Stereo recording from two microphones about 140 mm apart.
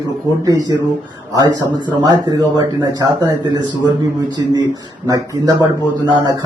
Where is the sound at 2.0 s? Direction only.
30° right (ahead or behind).